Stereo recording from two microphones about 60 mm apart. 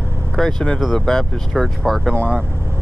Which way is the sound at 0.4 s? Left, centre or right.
Centre.